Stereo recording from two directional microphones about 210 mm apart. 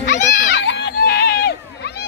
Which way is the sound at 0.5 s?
60° left (ahead or behind).